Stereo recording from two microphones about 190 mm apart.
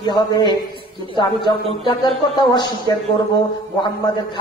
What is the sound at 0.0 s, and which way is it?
Speech, 20° left (ahead or behind).